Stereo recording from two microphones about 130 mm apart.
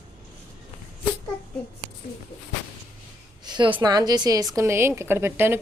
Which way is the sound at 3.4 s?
35° right (ahead or behind).